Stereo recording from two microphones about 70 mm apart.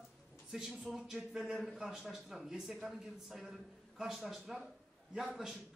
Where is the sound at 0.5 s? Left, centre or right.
Centre.